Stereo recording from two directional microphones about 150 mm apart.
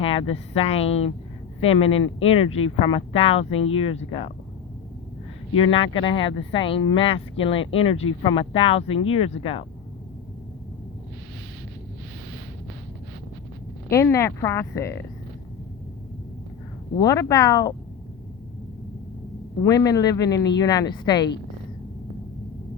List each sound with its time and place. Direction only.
0.0 s speech: 40° left (ahead or behind)
5.5 s speech: 35° left (ahead or behind)
13.9 s speech: 20° left (ahead or behind)
17.0 s speech: 20° left (ahead or behind)
19.6 s speech: 25° left (ahead or behind)